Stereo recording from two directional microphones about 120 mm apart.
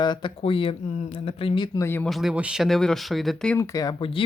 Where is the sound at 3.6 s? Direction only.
30° left (ahead or behind).